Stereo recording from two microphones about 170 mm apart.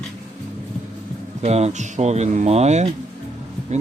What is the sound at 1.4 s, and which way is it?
Speech, 40° right (ahead or behind).